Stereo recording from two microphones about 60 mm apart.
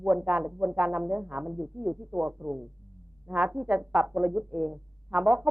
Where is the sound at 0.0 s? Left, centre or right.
Right.